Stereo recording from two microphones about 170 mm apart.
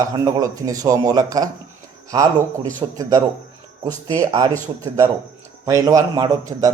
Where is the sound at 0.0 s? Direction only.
20° right (ahead or behind).